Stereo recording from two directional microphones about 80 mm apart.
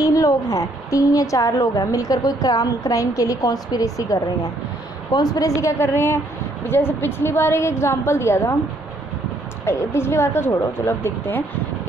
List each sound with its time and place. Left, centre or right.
0.0 s a woman's voice: left
9.7 s a woman's voice: left